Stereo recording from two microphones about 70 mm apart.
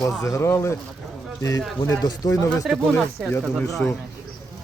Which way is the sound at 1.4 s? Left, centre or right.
Left.